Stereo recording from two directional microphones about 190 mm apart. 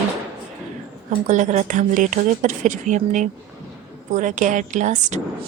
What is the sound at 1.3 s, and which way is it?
Speech, 40° right (ahead or behind).